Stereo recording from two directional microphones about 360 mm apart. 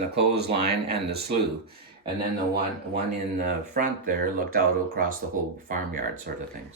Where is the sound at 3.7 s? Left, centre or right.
Right.